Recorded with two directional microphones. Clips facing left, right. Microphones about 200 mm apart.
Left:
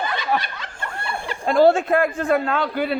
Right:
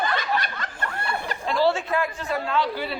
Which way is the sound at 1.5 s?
50° left (ahead or behind).